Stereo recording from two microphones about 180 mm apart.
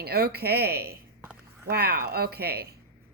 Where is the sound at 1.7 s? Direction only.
60° right (ahead or behind).